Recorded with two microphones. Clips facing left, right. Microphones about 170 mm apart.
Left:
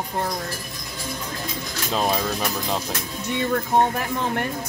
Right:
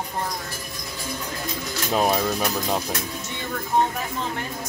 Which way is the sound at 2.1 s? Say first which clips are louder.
Right 2 dB; centre (ahead or behind).